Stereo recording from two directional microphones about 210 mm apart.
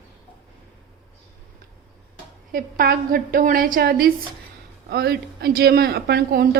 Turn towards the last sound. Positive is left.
turn(degrees=-50)  # may be behind; listen again after turning